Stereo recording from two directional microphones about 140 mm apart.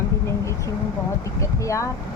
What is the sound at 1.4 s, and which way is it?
Speech, 20° left (ahead or behind).